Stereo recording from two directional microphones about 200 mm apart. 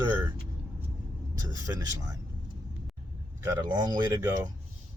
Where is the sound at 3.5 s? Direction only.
20° right (ahead or behind).